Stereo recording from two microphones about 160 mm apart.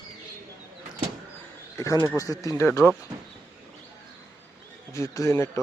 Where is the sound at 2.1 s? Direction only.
20° left (ahead or behind).